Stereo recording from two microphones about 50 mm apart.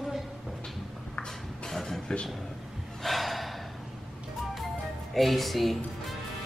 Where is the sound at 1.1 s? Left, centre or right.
Centre.